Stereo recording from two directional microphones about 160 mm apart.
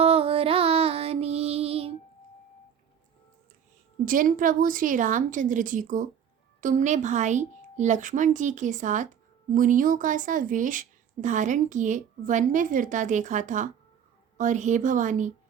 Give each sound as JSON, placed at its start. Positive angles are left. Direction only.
{"t": 0.0, "sound": "music", "side_deg": -35}
{"t": 4.0, "sound": "a woman's voice", "side_deg": -60}